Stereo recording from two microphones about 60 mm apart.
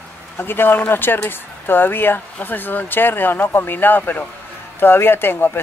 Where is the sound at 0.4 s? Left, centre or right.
Left.